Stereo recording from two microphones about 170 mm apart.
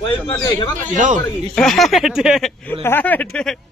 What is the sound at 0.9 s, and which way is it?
Speech, 50° right (ahead or behind).